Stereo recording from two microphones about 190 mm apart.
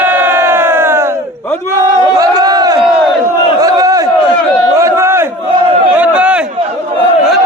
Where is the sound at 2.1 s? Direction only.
20° right (ahead or behind).